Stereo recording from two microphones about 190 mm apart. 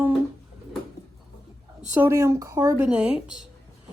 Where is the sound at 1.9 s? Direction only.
15° right (ahead or behind).